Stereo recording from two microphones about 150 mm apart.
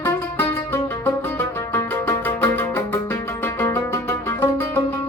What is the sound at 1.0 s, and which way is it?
Music, 15° left (ahead or behind).